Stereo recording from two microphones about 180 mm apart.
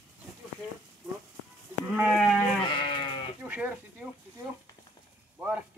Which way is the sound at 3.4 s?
5° right (ahead or behind).